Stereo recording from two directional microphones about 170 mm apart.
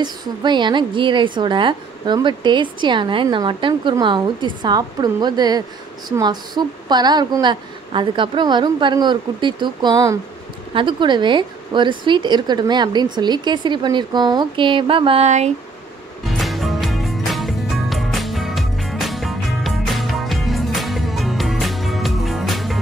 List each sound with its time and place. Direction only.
0.0 s a woman's voice: 25° right (ahead or behind); by 15.5 s 40° right (ahead or behind)
16.3 s music: centre (ahead or behind)